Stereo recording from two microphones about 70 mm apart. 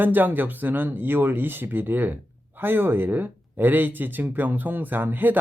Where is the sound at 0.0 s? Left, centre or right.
Right.